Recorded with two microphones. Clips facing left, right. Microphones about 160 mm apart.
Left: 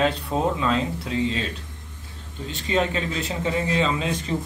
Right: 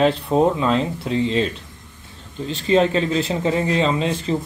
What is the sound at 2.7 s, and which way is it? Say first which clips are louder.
Speech: right 7 dB; 30° right (ahead or behind).